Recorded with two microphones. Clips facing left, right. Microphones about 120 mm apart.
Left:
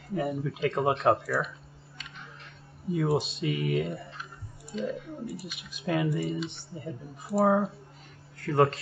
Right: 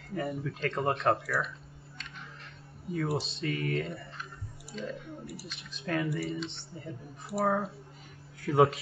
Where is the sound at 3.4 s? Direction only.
5° left (ahead or behind).